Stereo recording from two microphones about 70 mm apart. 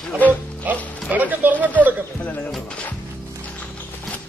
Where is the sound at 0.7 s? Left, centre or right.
Right.